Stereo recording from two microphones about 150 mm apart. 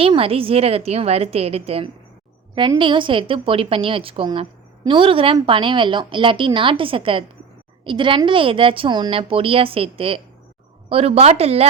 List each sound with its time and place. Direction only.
0.0 s a woman's voice: 40° right (ahead or behind)